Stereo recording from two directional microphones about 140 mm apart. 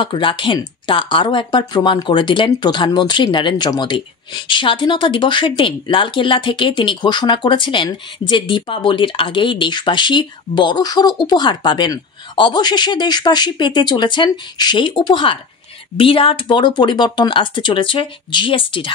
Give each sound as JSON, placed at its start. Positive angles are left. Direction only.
{"t": 0.0, "sound": "speech", "side_deg": 35}